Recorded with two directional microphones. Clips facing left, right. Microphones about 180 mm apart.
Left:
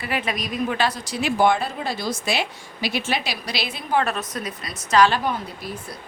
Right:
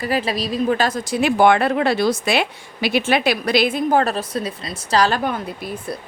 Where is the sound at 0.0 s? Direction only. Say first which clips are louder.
Right 5 dB; 35° right (ahead or behind).